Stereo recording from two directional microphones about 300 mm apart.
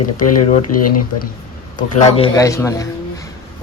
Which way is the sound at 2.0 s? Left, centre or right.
Centre.